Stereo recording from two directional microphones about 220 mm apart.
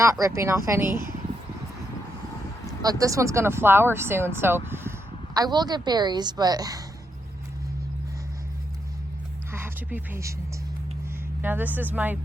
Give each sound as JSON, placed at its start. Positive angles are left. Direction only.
{"t": 0.0, "sound": "speech", "side_deg": -15}
{"t": 2.6, "sound": "speech", "side_deg": -15}
{"t": 9.5, "sound": "a sound", "side_deg": -10}
{"t": 11.4, "sound": "speech", "side_deg": -10}